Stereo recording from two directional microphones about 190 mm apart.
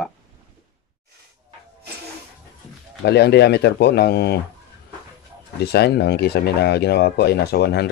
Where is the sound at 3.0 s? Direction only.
60° left (ahead or behind).